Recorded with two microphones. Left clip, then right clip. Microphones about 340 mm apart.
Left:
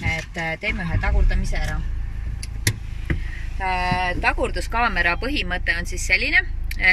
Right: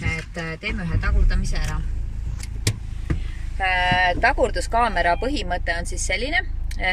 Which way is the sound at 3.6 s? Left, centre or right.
Right.